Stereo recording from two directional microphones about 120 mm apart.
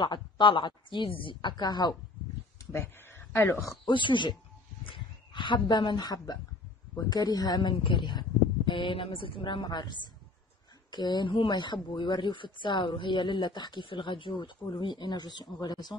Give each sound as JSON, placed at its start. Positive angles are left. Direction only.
{"t": 0.0, "sound": "speech", "side_deg": 40}
{"t": 2.6, "sound": "a sound", "side_deg": 20}
{"t": 3.8, "sound": "speech", "side_deg": 40}